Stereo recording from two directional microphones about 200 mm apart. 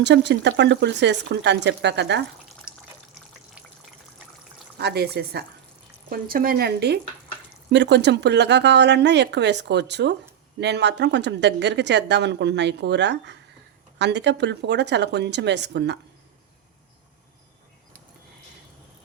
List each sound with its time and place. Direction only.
0.0 s speech: 60° right (ahead or behind)
4.8 s speech: 55° right (ahead or behind)